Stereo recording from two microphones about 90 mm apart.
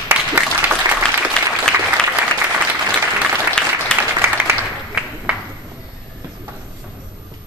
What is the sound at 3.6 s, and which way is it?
Applause, 10° left (ahead or behind).